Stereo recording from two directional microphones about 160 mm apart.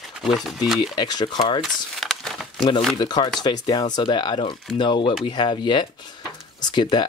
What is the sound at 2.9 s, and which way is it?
Speech, 25° left (ahead or behind).